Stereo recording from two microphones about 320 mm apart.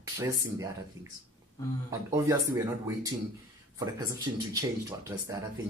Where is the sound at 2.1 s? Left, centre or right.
Centre.